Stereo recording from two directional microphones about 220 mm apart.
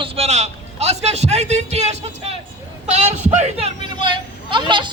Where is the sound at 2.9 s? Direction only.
30° right (ahead or behind).